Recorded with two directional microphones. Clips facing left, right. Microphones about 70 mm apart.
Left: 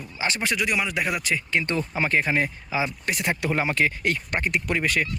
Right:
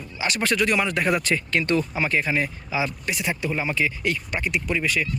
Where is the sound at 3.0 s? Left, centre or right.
Left.